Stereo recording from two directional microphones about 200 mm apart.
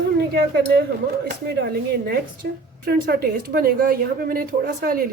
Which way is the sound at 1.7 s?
50° right (ahead or behind).